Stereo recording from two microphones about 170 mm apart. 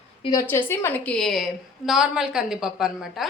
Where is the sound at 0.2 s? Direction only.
25° left (ahead or behind).